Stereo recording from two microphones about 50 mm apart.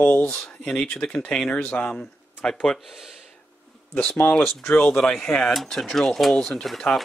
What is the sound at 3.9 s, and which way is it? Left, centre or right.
Speech, centre.